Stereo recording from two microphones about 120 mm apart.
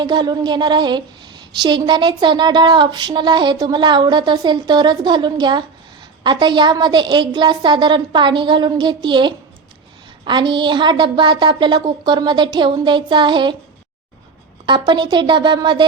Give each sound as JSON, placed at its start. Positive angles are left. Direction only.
{"t": 0.0, "sound": "a woman's voice", "side_deg": -35}
{"t": 14.7, "sound": "a woman's voice", "side_deg": -40}